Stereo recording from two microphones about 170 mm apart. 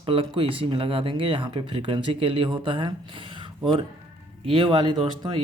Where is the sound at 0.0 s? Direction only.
35° right (ahead or behind).